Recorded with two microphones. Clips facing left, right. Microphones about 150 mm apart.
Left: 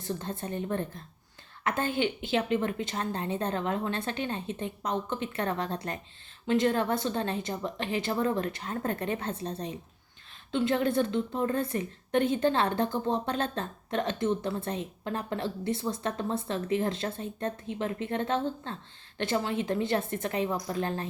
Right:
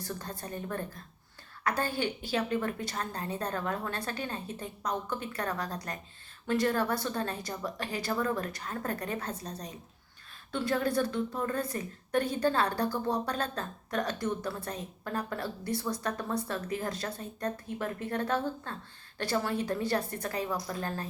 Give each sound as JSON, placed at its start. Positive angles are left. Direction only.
{"t": 0.0, "sound": "a woman's voice", "side_deg": 25}